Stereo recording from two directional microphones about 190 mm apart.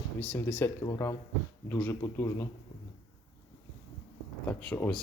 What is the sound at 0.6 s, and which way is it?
Speech, 15° left (ahead or behind).